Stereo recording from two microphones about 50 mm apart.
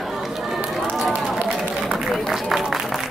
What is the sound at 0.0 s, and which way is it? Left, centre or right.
Run, centre.